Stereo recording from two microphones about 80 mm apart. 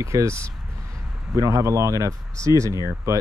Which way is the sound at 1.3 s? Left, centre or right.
Right.